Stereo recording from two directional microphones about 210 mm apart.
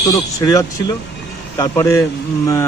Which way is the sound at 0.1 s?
15° left (ahead or behind).